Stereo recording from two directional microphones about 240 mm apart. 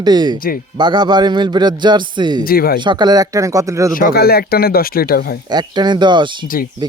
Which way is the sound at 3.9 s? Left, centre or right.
Left.